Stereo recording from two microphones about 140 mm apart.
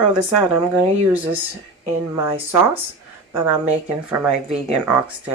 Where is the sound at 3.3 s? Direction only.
15° right (ahead or behind).